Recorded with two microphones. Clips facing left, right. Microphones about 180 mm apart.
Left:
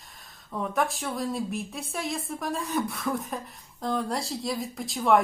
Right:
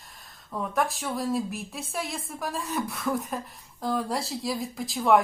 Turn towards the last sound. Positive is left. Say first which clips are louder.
# right 1 dB
turn(degrees=0)  # may be behind; listen again after turning